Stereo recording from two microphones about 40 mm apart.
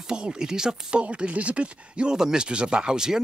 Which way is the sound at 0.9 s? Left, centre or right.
Right.